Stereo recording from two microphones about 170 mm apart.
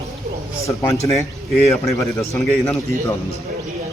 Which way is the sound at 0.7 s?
15° left (ahead or behind).